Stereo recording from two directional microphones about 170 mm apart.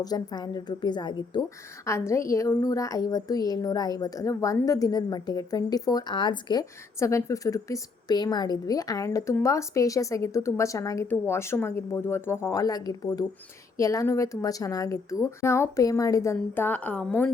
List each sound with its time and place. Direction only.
0.0 s a woman's voice: 25° left (ahead or behind); by 17.3 s 5° left (ahead or behind)